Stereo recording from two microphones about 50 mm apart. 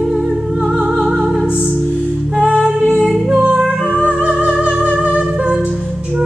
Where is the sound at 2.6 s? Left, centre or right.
Centre.